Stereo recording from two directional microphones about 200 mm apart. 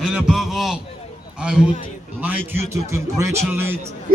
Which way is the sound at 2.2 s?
10° right (ahead or behind).